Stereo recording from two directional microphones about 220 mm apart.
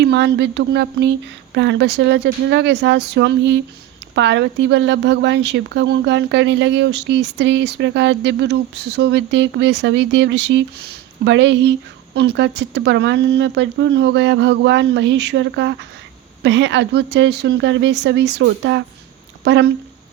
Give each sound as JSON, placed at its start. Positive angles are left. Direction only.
{"t": 0.0, "sound": "speech", "side_deg": -50}